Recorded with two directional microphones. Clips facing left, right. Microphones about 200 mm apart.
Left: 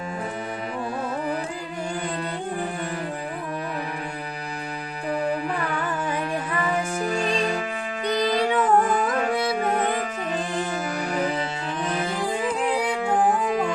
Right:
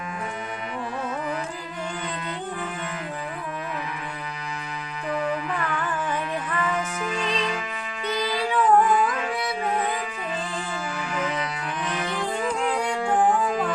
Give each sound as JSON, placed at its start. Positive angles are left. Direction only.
{"t": 5.1, "sound": "music", "side_deg": 35}
{"t": 8.2, "sound": "music", "side_deg": 55}
{"t": 12.3, "sound": "music", "side_deg": 5}
{"t": 13.1, "sound": "brass instrument", "side_deg": 5}